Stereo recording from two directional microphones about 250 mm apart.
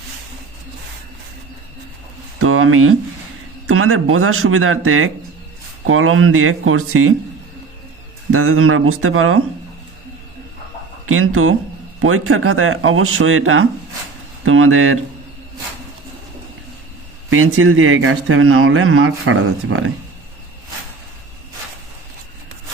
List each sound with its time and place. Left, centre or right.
2.4 s a man's voice: right
8.3 s a man's voice: right
11.0 s a man's voice: right
17.2 s a man's voice: right